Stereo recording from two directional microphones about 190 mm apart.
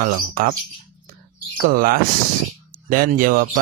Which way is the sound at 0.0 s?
50° right (ahead or behind).